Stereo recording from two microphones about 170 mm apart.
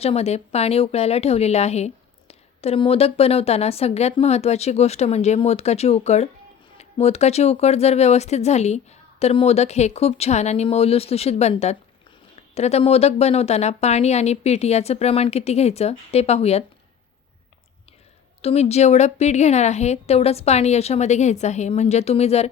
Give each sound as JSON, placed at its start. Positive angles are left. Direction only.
{"t": 0.0, "sound": "speech", "side_deg": 35}
{"t": 18.4, "sound": "speech", "side_deg": 40}